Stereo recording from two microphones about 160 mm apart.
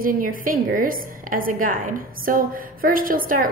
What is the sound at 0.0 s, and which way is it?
A woman's voice, 60° right (ahead or behind).